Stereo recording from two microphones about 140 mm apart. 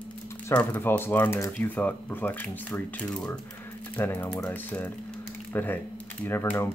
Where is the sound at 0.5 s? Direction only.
15° left (ahead or behind).